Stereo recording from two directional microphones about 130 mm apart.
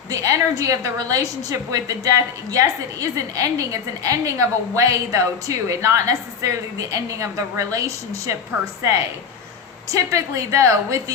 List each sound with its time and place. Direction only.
0.1 s a woman's voice: 25° right (ahead or behind)
9.9 s a woman's voice: 25° right (ahead or behind)